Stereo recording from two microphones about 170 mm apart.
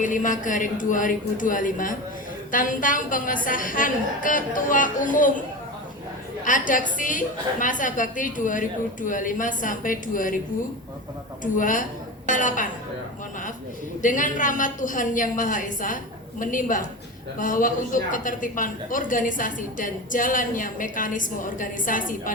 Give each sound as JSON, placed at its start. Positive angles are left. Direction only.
{"t": 0.0, "sound": "a woman's voice", "side_deg": 50}
{"t": 6.4, "sound": "a woman's voice", "side_deg": 50}
{"t": 11.5, "sound": "a woman's voice", "side_deg": 50}
{"t": 14.0, "sound": "a woman's voice", "side_deg": 50}